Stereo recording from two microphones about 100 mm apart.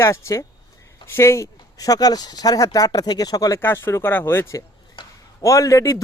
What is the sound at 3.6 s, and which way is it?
Speech, 25° left (ahead or behind).